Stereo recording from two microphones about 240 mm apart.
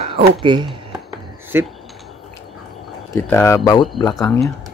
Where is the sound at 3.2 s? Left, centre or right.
Centre.